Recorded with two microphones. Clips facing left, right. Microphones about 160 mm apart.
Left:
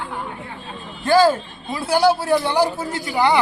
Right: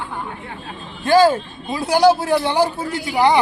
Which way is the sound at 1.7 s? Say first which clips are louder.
Right 3 dB; 15° right (ahead or behind).